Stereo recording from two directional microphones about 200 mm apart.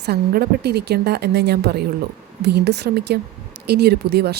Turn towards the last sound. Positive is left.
turn(degrees=-55)  # may be behind; listen again after turning